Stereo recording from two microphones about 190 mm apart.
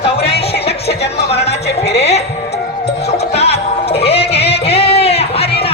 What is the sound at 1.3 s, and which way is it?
Music, 35° left (ahead or behind).